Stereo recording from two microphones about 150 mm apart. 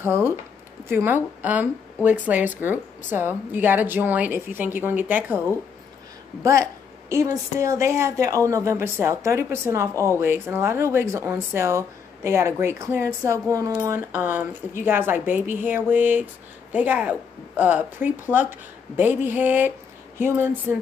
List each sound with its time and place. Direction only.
0.0 s a woman's voice: 15° right (ahead or behind)
6.4 s a woman's voice: 20° right (ahead or behind)